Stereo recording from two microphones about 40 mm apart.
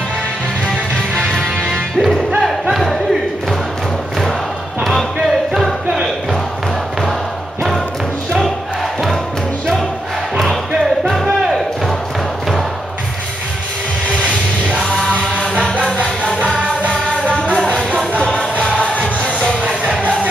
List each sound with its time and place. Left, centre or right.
1.1 s music: centre
2.7 s a sound: centre
4.8 s music: centre
11.4 s a sound: centre
14.1 s music: right
16.3 s music: right
17.6 s music: centre